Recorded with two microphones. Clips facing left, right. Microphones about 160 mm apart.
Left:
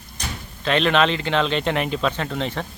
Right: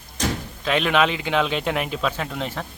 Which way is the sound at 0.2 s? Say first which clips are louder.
Right 8 dB; 90° right.